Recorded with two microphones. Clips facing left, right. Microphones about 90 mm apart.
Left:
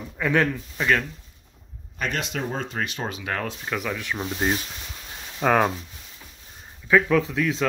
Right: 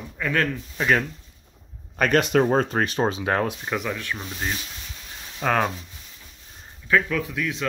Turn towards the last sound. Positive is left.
turn(degrees=25)  # may be behind; listen again after turning